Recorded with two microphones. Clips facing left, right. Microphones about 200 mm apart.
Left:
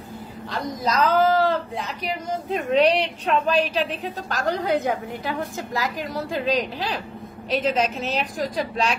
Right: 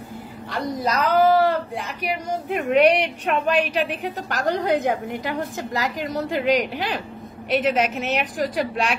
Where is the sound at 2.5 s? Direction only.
10° right (ahead or behind).